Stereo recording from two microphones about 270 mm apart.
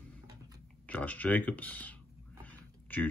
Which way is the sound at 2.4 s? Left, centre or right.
Centre.